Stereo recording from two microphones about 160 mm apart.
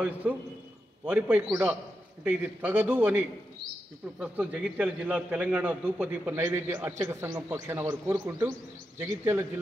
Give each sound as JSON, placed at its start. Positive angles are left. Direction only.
{"t": 0.0, "sound": "a man's voice", "side_deg": -10}